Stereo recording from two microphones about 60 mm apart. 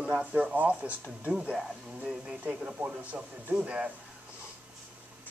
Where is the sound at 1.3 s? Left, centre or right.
Centre.